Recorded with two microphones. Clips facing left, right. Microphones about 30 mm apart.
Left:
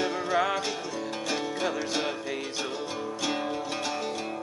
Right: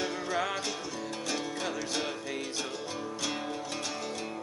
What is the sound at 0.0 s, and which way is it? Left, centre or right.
Music, centre.